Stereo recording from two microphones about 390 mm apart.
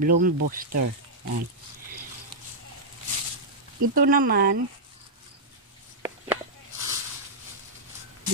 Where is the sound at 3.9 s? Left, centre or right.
Right.